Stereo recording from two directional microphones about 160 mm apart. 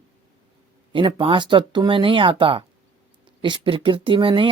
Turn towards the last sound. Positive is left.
turn(degrees=-35)  # may be behind; listen again after turning